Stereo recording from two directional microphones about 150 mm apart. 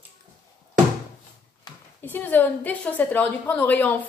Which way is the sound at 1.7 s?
30° left (ahead or behind).